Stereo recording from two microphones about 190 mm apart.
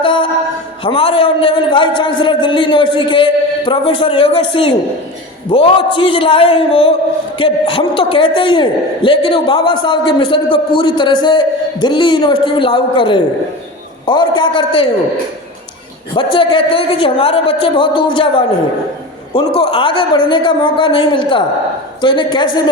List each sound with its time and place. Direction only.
0.0 s a man's voice: 25° left (ahead or behind)
16.1 s a man's voice: 25° left (ahead or behind)